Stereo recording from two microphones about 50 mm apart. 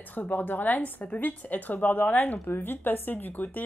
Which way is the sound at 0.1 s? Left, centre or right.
Left.